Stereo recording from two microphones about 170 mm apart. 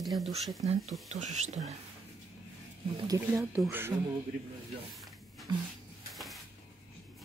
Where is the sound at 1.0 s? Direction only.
40° right (ahead or behind).